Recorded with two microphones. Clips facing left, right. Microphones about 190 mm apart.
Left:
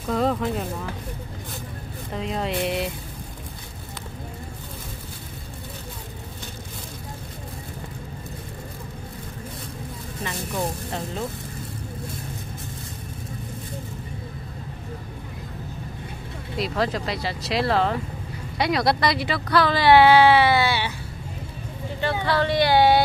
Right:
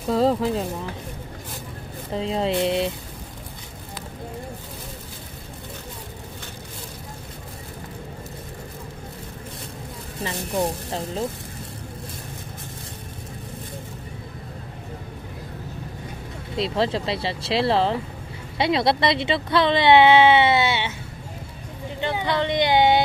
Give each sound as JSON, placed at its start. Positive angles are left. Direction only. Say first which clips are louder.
{"t": 0.1, "sound": "speech", "louder": "right 3 dB", "side_deg": -30}
{"t": 2.1, "sound": "speech", "louder": "right 4 dB", "side_deg": -30}
{"t": 10.2, "sound": "speech", "louder": "right 3 dB", "side_deg": -30}
{"t": 16.5, "sound": "speech", "louder": "right 2 dB", "side_deg": -25}
{"t": 22.0, "sound": "speech", "louder": "left 1 dB", "side_deg": -20}